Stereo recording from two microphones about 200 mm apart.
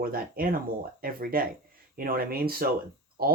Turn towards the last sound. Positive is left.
turn(degrees=-50)  # may be behind; listen again after turning